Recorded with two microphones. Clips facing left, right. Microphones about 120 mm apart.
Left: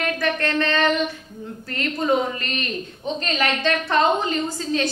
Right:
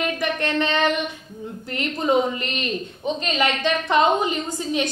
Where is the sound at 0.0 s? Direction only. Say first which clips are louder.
Left 1 dB; 20° right (ahead or behind).